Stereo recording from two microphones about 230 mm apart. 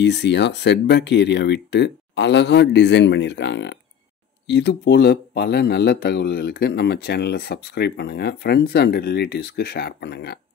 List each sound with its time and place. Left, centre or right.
0.0 s speech: left